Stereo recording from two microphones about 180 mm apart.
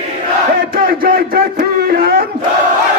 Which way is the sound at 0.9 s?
55° right (ahead or behind).